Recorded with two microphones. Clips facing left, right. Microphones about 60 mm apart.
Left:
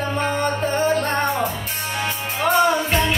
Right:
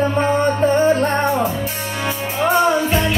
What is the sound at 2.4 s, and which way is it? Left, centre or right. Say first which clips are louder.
Music: right 2 dB; centre.